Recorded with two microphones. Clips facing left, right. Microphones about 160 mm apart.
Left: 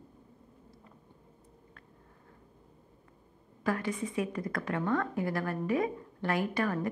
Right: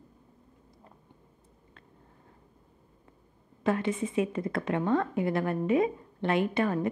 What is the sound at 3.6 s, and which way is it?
A woman's voice, 25° right (ahead or behind).